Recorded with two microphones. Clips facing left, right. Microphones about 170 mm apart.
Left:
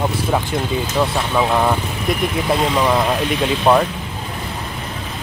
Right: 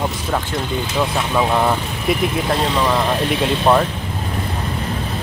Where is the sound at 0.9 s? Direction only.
Centre (ahead or behind).